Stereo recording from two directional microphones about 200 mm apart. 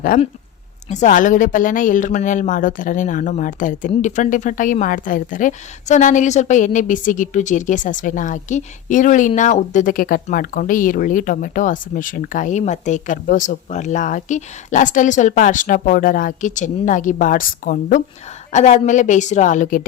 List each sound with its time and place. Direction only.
0.1 s speech: 40° left (ahead or behind)